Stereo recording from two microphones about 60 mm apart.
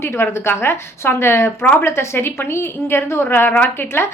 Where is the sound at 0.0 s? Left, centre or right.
Left.